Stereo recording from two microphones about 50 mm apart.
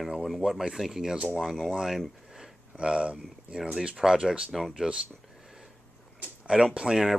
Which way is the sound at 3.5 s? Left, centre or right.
Centre.